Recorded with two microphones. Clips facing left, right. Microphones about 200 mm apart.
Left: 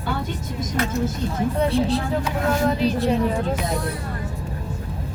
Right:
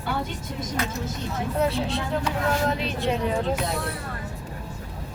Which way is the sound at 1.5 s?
Centre (ahead or behind).